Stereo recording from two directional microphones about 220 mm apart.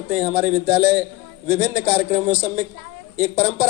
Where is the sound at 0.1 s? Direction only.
25° right (ahead or behind).